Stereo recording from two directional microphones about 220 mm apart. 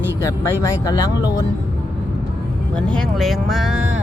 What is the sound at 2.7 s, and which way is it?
Speech, 5° left (ahead or behind).